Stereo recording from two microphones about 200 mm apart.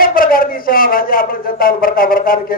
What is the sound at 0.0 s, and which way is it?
A man's voice, 45° left (ahead or behind).